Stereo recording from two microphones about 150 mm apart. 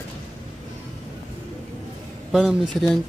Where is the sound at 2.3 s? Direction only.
Centre (ahead or behind).